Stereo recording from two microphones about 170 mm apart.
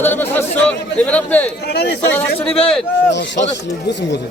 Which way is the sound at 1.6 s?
70° left (ahead or behind).